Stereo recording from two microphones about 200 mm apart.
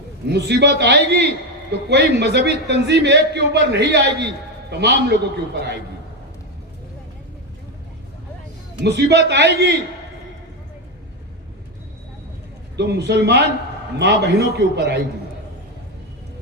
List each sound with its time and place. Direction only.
0.3 s a man's voice: 55° right (ahead or behind)
8.8 s a man's voice: 55° right (ahead or behind)
12.7 s a man's voice: 55° right (ahead or behind)